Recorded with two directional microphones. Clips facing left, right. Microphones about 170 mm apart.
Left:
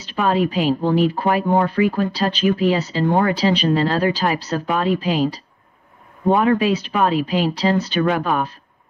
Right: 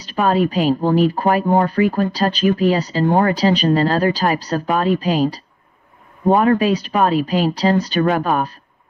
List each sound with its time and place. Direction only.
0.0 s speech: 40° right (ahead or behind)